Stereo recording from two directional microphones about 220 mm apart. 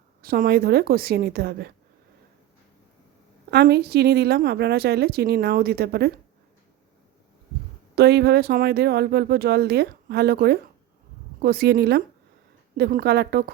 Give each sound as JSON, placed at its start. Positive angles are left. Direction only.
{"t": 0.2, "sound": "speech", "side_deg": -45}
{"t": 3.5, "sound": "speech", "side_deg": -50}
{"t": 7.9, "sound": "speech", "side_deg": -50}